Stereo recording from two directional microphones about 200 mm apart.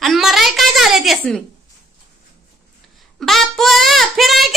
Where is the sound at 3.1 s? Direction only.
Centre (ahead or behind).